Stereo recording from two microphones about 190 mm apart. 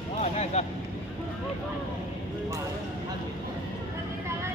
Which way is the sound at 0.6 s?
35° left (ahead or behind).